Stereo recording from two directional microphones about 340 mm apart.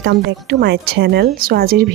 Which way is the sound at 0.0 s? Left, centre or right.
Right.